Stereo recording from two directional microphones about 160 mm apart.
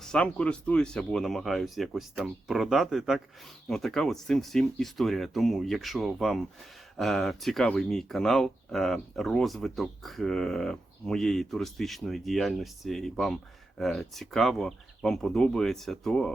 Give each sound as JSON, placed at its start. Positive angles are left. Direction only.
{"t": 0.0, "sound": "speech", "side_deg": 5}